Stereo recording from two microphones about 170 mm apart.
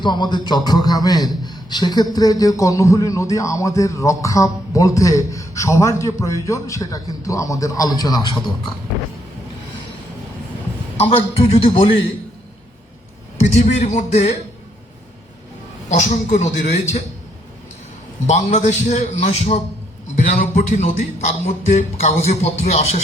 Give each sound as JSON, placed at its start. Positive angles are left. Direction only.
{"t": 0.0, "sound": "a man's voice", "side_deg": 25}
{"t": 11.1, "sound": "music", "side_deg": 35}
{"t": 13.6, "sound": "a man's voice", "side_deg": 40}
{"t": 15.9, "sound": "a man's voice", "side_deg": 45}
{"t": 18.3, "sound": "a man's voice", "side_deg": 45}
{"t": 20.3, "sound": "music", "side_deg": 45}